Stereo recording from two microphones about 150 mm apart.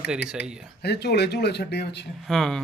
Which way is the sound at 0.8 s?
90° left.